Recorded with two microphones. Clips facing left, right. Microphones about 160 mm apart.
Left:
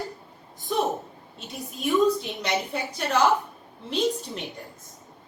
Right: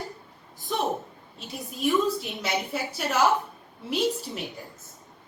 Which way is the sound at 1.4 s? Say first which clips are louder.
Right 3 dB; centre (ahead or behind).